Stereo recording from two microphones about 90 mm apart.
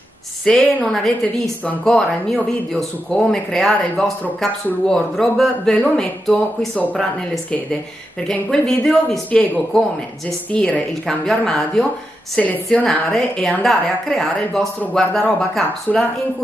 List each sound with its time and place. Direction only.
0.5 s a woman's voice: 15° left (ahead or behind)
8.3 s a woman's voice: 5° left (ahead or behind)